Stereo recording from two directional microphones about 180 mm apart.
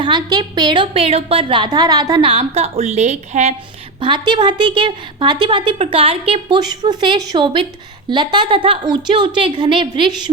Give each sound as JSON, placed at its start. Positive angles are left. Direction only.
{"t": 0.0, "sound": "a woman's voice", "side_deg": -25}
{"t": 4.3, "sound": "a woman's voice", "side_deg": -25}